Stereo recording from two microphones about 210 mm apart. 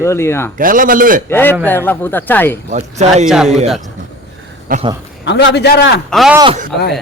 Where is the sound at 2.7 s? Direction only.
35° right (ahead or behind).